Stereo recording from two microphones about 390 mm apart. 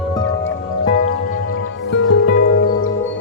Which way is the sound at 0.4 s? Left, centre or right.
Left.